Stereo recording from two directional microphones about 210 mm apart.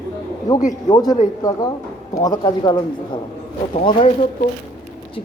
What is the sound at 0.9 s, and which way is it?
A man's voice, 20° left (ahead or behind).